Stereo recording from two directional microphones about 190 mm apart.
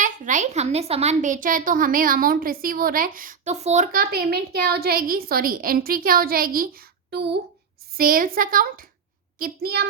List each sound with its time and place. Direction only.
0.0 s a woman's voice: 40° right (ahead or behind)
3.9 s a woman's voice: 55° right (ahead or behind)
7.9 s a woman's voice: 50° right (ahead or behind)